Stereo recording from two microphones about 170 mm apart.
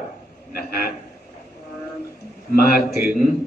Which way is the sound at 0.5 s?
60° left (ahead or behind).